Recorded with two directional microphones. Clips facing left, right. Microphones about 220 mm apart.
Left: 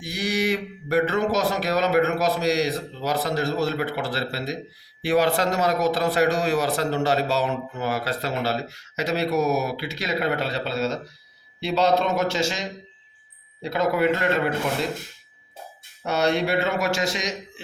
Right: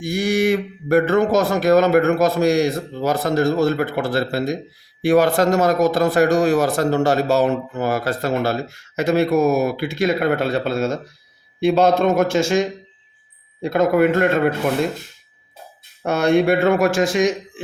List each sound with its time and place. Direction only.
0.0 s speech: 50° right (ahead or behind)
16.0 s speech: 50° right (ahead or behind)